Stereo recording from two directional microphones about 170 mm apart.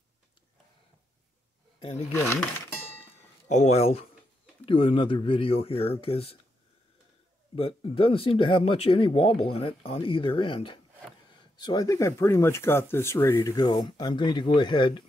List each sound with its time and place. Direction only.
2.1 s music: 10° left (ahead or behind)
3.4 s speech: 40° left (ahead or behind)
7.5 s speech: 35° left (ahead or behind)